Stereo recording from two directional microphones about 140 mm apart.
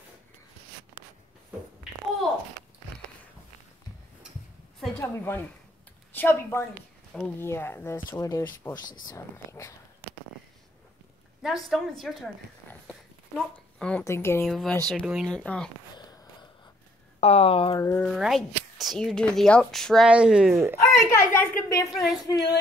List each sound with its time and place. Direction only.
4.9 s a woman's voice: 20° left (ahead or behind)
11.4 s speech: centre (ahead or behind)
13.7 s speech: 5° left (ahead or behind)
14.0 s a woman's voice: 15° left (ahead or behind)
14.4 s speech: centre (ahead or behind)
16.0 s sniff: 30° left (ahead or behind)
17.2 s speech: 45° left (ahead or behind)
17.9 s speech: centre (ahead or behind)
20.8 s speech: 20° left (ahead or behind)
21.9 s speech: centre (ahead or behind)
22.3 s speech: 30° left (ahead or behind)